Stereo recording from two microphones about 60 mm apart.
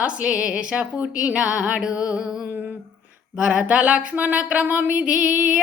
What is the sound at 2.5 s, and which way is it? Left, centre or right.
Female singing, right.